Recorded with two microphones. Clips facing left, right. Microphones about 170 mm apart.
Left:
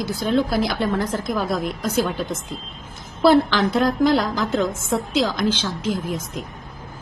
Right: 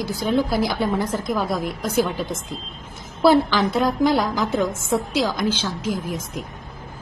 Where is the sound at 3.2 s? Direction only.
5° right (ahead or behind).